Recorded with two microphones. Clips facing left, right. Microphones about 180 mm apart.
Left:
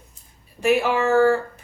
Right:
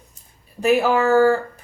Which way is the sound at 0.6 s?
35° right (ahead or behind).